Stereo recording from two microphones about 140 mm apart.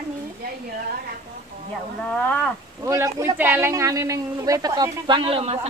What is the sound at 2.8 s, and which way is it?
A man's voice, 20° right (ahead or behind).